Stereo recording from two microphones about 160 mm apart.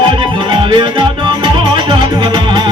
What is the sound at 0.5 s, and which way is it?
Music, 30° right (ahead or behind).